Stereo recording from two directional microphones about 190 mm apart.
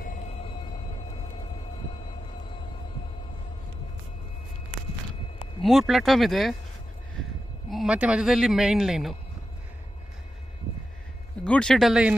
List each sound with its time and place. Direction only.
0.0 s a sound: 40° left (ahead or behind)
5.6 s a man's voice: centre (ahead or behind)
7.7 s a man's voice: 5° right (ahead or behind)
11.4 s a man's voice: 5° left (ahead or behind)